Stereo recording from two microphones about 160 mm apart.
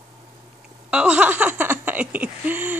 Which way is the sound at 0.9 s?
10° right (ahead or behind).